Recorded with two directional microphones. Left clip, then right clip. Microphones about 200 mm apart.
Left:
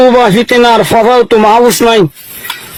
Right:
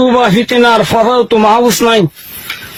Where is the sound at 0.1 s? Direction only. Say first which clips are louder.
Left 3 dB; 45° left (ahead or behind).